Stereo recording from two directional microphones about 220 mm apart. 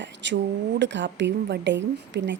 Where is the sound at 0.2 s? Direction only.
55° right (ahead or behind).